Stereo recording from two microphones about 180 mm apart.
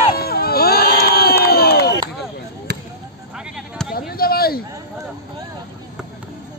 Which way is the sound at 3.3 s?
5° right (ahead or behind).